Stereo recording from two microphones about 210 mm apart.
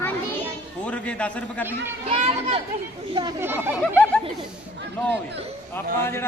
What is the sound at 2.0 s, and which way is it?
Speech, 30° right (ahead or behind).